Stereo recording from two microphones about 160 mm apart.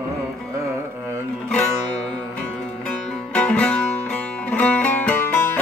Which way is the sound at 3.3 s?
10° left (ahead or behind).